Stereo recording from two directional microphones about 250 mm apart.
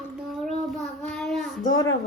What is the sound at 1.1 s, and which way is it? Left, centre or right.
Child singing, centre.